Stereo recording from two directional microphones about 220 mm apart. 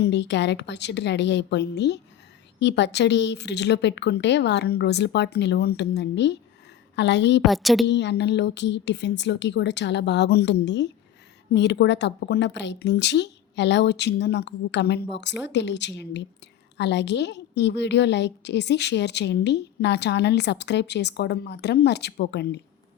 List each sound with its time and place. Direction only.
0.0 s a woman's voice: 50° left (ahead or behind)
7.4 s a woman's voice: centre (ahead or behind)
7.9 s a woman's voice: 50° left (ahead or behind)